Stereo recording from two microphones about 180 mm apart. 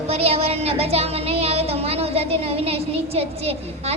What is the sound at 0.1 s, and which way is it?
A woman's voice, 35° right (ahead or behind).